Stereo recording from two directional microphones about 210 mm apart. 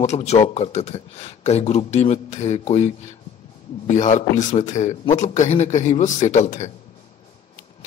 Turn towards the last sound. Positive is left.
turn(degrees=35)  # may be behind; listen again after turning